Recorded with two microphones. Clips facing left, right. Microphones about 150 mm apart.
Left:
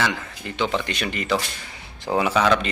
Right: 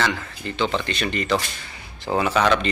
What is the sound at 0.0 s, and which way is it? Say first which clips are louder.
Speech: right 1 dB; 10° left (ahead or behind).